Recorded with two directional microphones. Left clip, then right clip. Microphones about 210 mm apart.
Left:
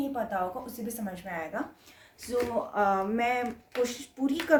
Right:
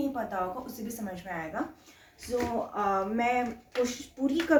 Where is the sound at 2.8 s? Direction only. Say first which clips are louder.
Left 2 dB; 50° left (ahead or behind).